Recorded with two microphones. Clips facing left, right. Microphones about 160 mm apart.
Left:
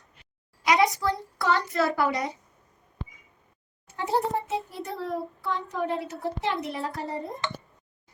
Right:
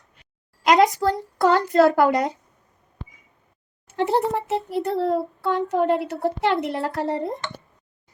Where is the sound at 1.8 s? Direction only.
65° right (ahead or behind).